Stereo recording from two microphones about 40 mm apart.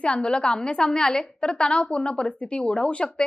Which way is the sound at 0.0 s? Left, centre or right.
Left.